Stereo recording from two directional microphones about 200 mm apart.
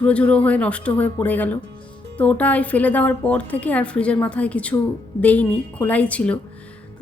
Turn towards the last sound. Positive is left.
turn(degrees=5)  # may be behind; listen again after turning